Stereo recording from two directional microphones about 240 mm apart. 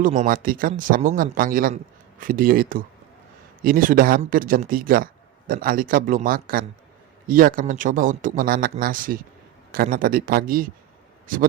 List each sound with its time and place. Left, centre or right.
0.0 s speech: right